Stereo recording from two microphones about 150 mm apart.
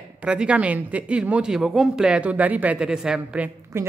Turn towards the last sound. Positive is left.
turn(degrees=-20)  # may be behind; listen again after turning